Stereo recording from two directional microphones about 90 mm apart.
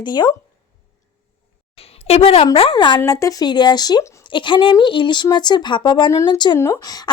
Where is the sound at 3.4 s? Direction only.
55° left (ahead or behind).